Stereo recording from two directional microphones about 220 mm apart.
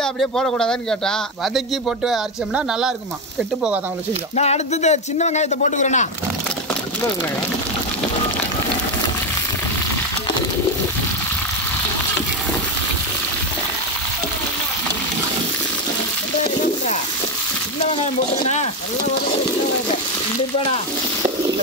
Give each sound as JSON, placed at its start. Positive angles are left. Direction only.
{"t": 0.0, "sound": "speech", "side_deg": 0}
{"t": 4.4, "sound": "speech", "side_deg": 30}
{"t": 16.4, "sound": "a sound", "side_deg": 30}
{"t": 18.0, "sound": "speech", "side_deg": 30}